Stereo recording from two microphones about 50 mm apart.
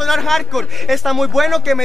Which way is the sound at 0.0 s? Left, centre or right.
Centre.